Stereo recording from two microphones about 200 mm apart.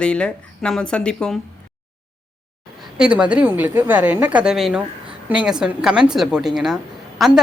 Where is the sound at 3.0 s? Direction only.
5° right (ahead or behind).